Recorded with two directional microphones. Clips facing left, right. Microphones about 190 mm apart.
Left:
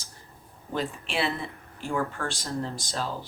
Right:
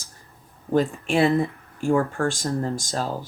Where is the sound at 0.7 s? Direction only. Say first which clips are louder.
Right 10 dB; 45° right (ahead or behind).